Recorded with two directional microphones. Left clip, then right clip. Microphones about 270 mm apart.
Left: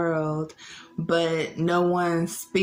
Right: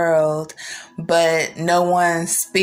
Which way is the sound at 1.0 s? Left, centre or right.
Right.